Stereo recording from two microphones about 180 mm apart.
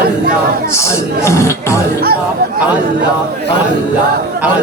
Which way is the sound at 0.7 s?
15° left (ahead or behind).